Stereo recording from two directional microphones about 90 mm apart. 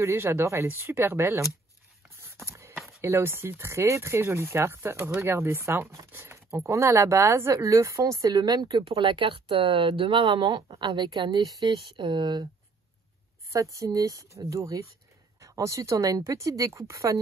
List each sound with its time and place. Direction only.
0.0 s speech: 30° right (ahead or behind)
2.0 s a sound: 30° right (ahead or behind)
3.0 s speech: 30° right (ahead or behind); by 10.9 s 75° right (ahead or behind)
10.9 s speech: 55° right (ahead or behind)
11.7 s speech: 60° right (ahead or behind)
13.5 s speech: 40° right (ahead or behind)